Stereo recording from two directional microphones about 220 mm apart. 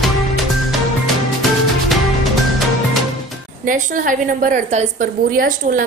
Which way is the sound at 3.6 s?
40° right (ahead or behind).